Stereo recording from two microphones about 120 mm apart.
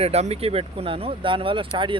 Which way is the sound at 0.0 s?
60° right (ahead or behind).